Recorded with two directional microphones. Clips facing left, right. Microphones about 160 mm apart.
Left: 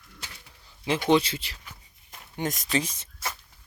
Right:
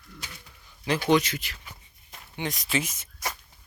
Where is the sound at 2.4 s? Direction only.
45° left (ahead or behind).